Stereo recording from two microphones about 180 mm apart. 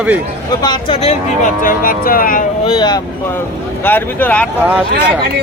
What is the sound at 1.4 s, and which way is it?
Speech, 50° left (ahead or behind).